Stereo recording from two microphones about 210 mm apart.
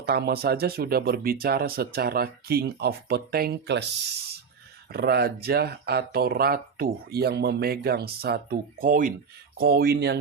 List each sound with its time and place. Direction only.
0.0 s speech: 50° right (ahead or behind)
4.9 s speech: 45° right (ahead or behind)